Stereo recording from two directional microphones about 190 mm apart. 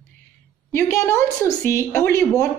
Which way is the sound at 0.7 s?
15° left (ahead or behind).